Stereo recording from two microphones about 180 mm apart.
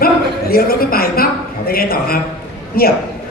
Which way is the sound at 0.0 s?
55° left (ahead or behind).